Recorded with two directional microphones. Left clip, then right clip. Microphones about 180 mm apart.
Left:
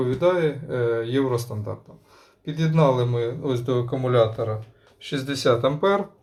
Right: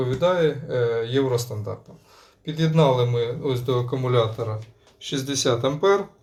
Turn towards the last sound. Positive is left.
turn(degrees=20)  # may be behind; listen again after turning